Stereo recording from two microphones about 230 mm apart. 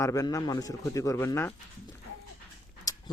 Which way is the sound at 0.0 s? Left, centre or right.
Centre.